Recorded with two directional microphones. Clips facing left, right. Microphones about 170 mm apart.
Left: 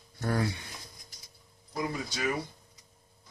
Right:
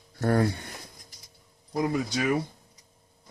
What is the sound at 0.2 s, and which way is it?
Speech, 50° right (ahead or behind).